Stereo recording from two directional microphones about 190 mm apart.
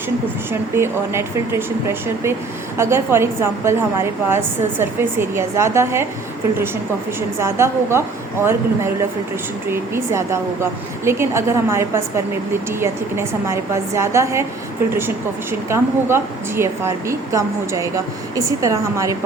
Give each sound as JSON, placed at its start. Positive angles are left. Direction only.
{"t": 0.8, "sound": "speech", "side_deg": -15}
{"t": 7.2, "sound": "speech", "side_deg": -15}
{"t": 15.7, "sound": "speech", "side_deg": -15}